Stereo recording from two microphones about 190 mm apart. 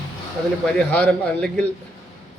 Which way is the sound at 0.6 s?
5° left (ahead or behind).